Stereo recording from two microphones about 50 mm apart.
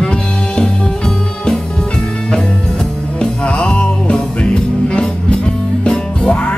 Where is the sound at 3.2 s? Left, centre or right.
Left.